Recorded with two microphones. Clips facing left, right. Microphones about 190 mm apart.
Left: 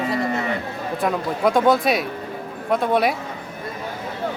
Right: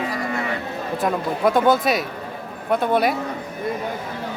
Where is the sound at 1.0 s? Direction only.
Centre (ahead or behind).